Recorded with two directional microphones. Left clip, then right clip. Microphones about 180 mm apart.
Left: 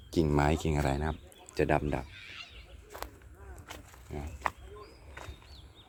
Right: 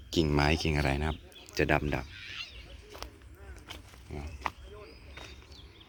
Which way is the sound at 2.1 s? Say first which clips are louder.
Right 4 dB; 65° left (ahead or behind).